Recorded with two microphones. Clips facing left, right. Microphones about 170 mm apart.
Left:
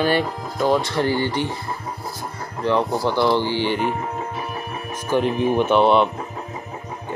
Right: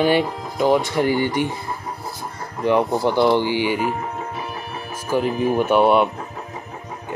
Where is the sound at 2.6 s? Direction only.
15° right (ahead or behind).